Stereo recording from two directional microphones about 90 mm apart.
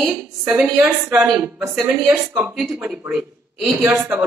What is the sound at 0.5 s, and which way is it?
Speech, 15° right (ahead or behind).